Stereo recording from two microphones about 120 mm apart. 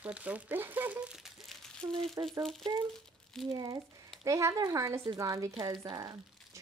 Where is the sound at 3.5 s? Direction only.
35° right (ahead or behind).